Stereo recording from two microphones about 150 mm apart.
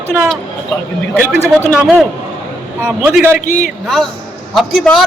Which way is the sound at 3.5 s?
60° left (ahead or behind).